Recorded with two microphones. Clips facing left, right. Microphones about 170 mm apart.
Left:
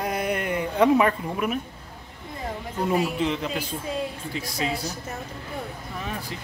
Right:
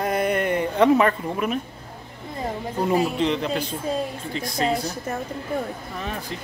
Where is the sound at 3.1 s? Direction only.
5° left (ahead or behind).